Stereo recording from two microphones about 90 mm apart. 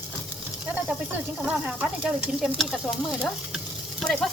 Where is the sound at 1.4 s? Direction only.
10° right (ahead or behind).